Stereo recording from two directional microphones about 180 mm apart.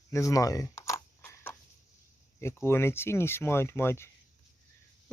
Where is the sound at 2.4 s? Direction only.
15° left (ahead or behind).